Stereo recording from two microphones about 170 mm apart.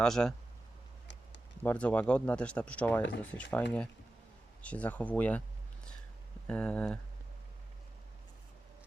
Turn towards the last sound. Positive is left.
turn(degrees=5)  # may be behind; listen again after turning